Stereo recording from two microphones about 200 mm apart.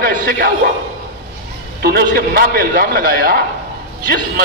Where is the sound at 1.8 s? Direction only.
50° right (ahead or behind).